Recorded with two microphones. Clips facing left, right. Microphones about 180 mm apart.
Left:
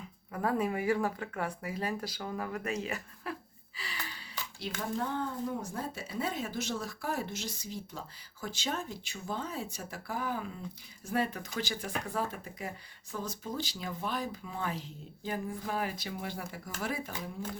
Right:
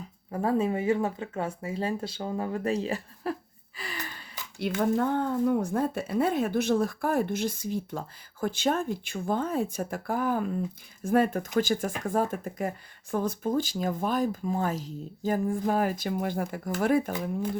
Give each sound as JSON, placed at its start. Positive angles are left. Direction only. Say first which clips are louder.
{"t": 0.3, "sound": "speech", "louder": "right 5 dB", "side_deg": -30}
{"t": 3.8, "sound": "speech", "louder": "right 5 dB", "side_deg": -50}